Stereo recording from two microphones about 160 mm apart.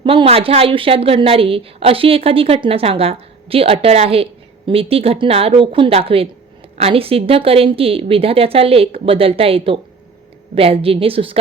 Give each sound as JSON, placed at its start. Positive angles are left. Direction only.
{"t": 0.0, "sound": "a woman's voice", "side_deg": -35}